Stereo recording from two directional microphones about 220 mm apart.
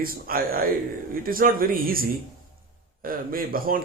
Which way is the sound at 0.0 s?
40° right (ahead or behind).